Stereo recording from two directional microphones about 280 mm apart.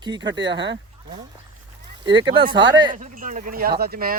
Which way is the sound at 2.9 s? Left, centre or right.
Right.